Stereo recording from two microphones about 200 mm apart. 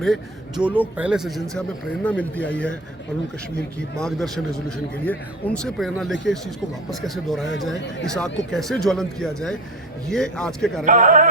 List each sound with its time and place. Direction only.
0.0 s a man's voice: centre (ahead or behind)
3.8 s a man's voice: 5° left (ahead or behind)
10.8 s speech: 40° right (ahead or behind)